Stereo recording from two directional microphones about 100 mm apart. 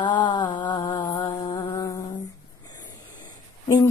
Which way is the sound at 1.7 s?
30° left (ahead or behind).